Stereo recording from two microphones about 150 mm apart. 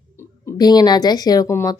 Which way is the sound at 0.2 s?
25° left (ahead or behind).